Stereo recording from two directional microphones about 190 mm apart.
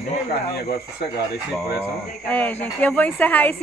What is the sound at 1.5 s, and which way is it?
A woman's voice, 5° left (ahead or behind).